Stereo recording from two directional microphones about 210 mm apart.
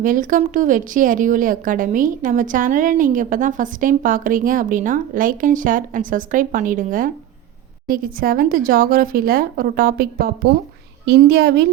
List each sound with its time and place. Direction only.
0.0 s a woman's voice: 40° right (ahead or behind)